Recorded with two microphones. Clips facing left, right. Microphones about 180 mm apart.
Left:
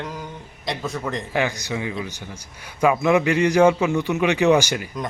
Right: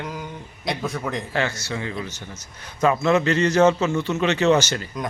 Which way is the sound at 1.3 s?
15° left (ahead or behind).